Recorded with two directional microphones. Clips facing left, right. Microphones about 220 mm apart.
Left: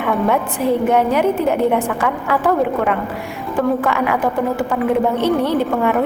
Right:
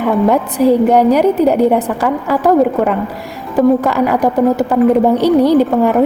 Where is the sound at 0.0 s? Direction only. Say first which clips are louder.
Right 5 dB; 40° right (ahead or behind).